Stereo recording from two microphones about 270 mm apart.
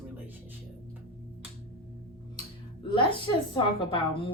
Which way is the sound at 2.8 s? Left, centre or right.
Centre.